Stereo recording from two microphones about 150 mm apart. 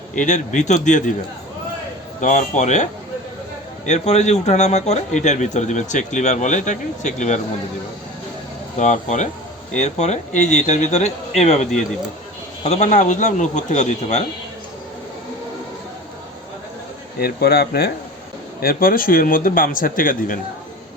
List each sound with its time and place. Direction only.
0.1 s speech: 55° left (ahead or behind)
2.2 s a man's voice: 50° left (ahead or behind)
3.8 s a man's voice: 50° left (ahead or behind)
8.8 s a man's voice: 50° left (ahead or behind)
17.2 s speech: 90° left
18.6 s a man's voice: 80° left